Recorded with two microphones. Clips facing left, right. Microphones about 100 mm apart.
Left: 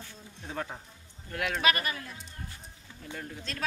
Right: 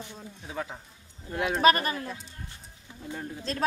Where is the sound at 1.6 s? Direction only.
40° right (ahead or behind).